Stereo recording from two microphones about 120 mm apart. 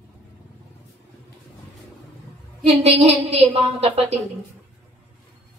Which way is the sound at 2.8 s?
60° right (ahead or behind).